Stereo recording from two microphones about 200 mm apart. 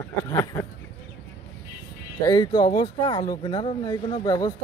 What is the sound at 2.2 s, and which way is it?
Speech, 20° left (ahead or behind).